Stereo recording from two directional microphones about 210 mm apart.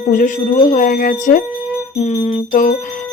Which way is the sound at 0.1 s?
40° left (ahead or behind).